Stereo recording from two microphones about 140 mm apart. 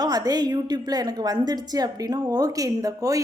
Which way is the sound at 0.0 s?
30° right (ahead or behind).